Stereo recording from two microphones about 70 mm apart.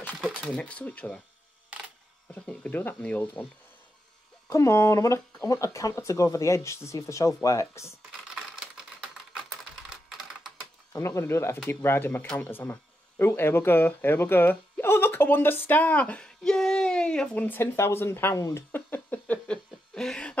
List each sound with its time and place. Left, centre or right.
0.6 s speech: left
1.7 s camera: centre
2.3 s speech: left
4.5 s speech: left
8.4 s typing: centre
11.0 s speech: left; by 17.4 s centre
17.4 s speech: left
18.3 s speech: left
18.7 s a sound: left; by 20.3 s centre